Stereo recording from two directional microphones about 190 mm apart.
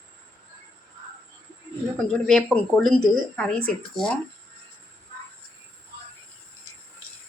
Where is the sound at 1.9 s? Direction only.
5° left (ahead or behind).